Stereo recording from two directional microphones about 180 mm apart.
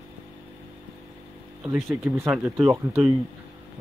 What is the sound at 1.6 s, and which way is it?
Speech, 10° right (ahead or behind).